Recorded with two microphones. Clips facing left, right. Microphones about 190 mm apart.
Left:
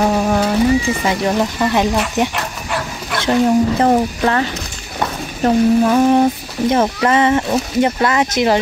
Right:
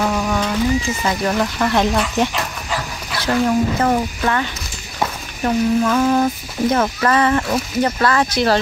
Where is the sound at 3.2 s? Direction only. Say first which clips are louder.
Left 3 dB; 25° left (ahead or behind).